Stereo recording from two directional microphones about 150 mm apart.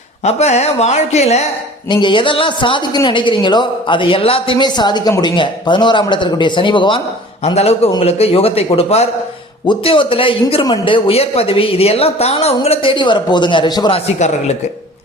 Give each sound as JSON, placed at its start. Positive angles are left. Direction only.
{"t": 0.3, "sound": "a woman's voice", "side_deg": 50}
{"t": 1.9, "sound": "a man's voice", "side_deg": 30}
{"t": 7.4, "sound": "a woman's voice", "side_deg": 45}
{"t": 13.9, "sound": "a woman's voice", "side_deg": 45}